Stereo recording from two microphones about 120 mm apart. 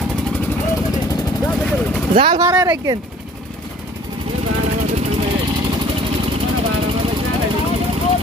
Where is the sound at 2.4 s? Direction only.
25° right (ahead or behind).